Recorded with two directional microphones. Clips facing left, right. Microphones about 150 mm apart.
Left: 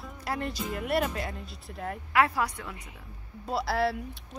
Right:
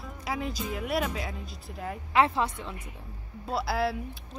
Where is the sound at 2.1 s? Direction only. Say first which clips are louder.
Right 1 dB; 25° right (ahead or behind).